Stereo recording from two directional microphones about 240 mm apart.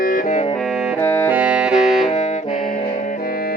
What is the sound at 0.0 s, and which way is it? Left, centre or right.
Music, left.